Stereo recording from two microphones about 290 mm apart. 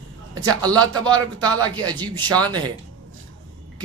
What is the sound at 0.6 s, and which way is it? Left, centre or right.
A man's voice, centre.